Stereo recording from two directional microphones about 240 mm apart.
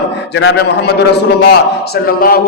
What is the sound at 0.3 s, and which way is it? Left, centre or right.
Speech, left.